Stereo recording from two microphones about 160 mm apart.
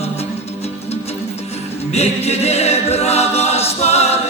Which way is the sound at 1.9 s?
40° left (ahead or behind).